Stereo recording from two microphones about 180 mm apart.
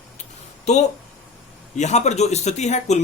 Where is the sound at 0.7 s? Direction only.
40° left (ahead or behind).